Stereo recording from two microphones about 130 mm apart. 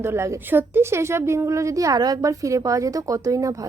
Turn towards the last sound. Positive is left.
turn(degrees=-25)  # may be behind; listen again after turning